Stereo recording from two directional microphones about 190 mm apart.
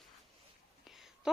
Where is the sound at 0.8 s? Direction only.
Centre (ahead or behind).